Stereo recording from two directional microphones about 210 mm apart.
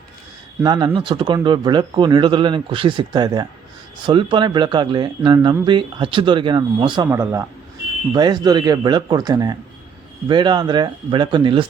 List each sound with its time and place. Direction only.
0.6 s speech: 20° right (ahead or behind)